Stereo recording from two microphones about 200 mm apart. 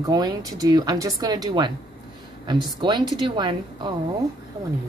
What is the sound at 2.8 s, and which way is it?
Speech, 20° right (ahead or behind).